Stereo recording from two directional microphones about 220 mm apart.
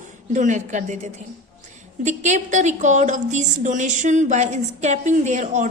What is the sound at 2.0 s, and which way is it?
A woman's voice, 30° right (ahead or behind).